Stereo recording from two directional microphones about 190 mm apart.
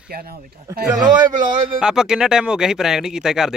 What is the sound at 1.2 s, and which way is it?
Speech, 25° right (ahead or behind).